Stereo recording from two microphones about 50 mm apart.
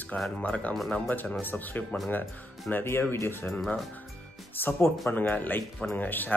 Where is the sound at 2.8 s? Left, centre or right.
Left.